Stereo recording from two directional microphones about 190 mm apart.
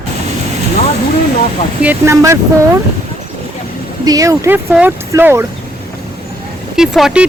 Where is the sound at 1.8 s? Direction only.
15° right (ahead or behind).